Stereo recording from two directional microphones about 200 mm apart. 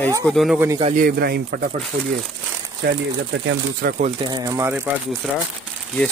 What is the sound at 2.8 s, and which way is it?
Speech, 60° right (ahead or behind).